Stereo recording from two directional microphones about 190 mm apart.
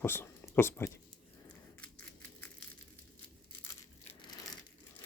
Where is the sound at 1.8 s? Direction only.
10° left (ahead or behind).